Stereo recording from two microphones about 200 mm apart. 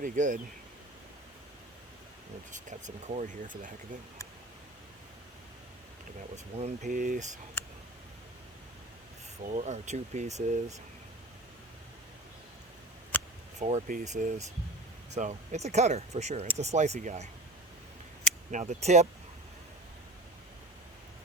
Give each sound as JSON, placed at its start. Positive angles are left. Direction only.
{"t": 0.0, "sound": "speech", "side_deg": -40}
{"t": 2.5, "sound": "speech", "side_deg": -40}
{"t": 6.3, "sound": "speech", "side_deg": -35}
{"t": 9.4, "sound": "speech", "side_deg": -35}
{"t": 13.1, "sound": "a sound", "side_deg": 10}
{"t": 13.6, "sound": "speech", "side_deg": -35}
{"t": 18.5, "sound": "speech", "side_deg": -35}